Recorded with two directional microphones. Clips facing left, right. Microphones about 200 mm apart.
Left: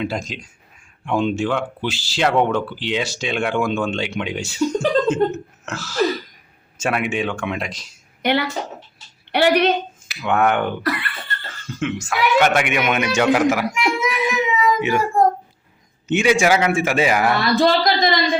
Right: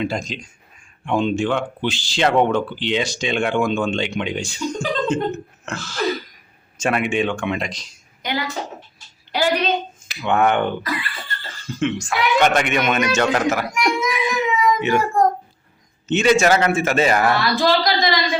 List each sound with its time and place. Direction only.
0.0 s speech: 5° left (ahead or behind)
8.2 s a woman's voice: 65° left (ahead or behind)
10.2 s speech: 5° left (ahead or behind)
10.8 s a woman's voice: 65° left (ahead or behind)
11.8 s a man's voice: 5° left (ahead or behind)
17.5 s speech: 25° left (ahead or behind)
17.8 s a sound: 50° left (ahead or behind)